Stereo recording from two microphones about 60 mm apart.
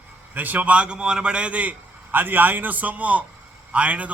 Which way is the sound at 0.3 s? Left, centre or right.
Right.